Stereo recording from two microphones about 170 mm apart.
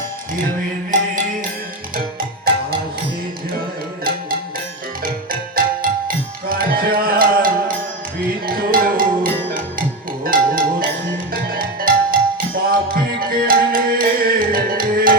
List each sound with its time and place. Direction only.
2.0 s music: 60° right (ahead or behind)
5.0 s tabla: 60° right (ahead or behind)
8.4 s music: 60° right (ahead or behind)